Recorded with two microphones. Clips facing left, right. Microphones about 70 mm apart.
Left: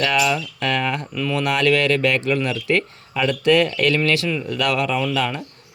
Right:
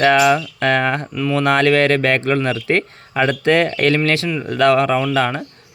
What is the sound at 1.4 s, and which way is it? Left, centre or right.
Speech, right.